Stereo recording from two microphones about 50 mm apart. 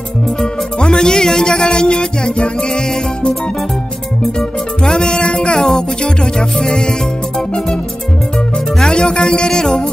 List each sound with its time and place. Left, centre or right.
0.4 s music: centre
4.4 s music: centre